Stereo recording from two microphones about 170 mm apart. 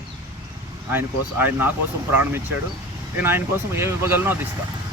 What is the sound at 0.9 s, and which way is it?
Speech, 10° right (ahead or behind).